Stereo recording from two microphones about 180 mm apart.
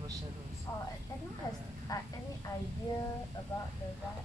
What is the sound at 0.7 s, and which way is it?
Speech, 15° left (ahead or behind).